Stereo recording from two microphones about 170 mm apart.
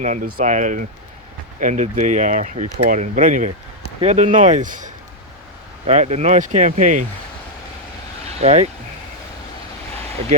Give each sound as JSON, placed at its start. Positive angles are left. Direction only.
{"t": 0.0, "sound": "speech", "side_deg": -50}
{"t": 8.3, "sound": "speech", "side_deg": -40}